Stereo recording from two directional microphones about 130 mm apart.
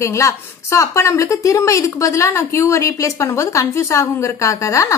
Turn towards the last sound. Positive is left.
turn(degrees=25)  # may be behind; listen again after turning